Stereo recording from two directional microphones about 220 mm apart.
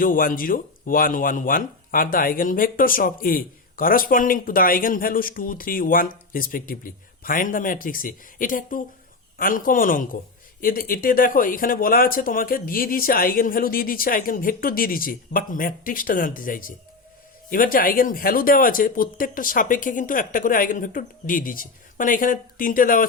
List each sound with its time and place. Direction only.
0.0 s speech: 40° left (ahead or behind)